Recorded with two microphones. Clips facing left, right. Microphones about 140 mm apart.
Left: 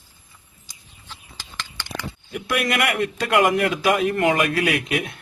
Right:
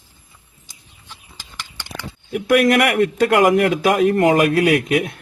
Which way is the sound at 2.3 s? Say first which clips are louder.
Right 9 dB; 45° right (ahead or behind).